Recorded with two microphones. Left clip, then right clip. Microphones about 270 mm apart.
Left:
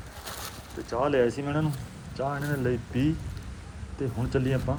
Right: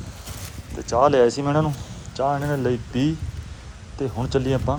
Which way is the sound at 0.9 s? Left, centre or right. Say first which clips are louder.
Right 8 dB; centre.